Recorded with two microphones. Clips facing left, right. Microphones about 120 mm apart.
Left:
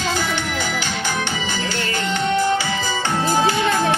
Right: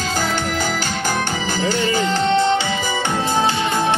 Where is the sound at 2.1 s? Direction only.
30° right (ahead or behind).